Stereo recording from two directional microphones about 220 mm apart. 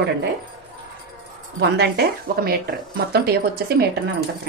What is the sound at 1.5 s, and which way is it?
A woman's voice, 50° right (ahead or behind).